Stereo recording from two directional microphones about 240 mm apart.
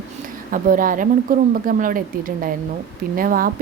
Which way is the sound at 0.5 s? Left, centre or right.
Right.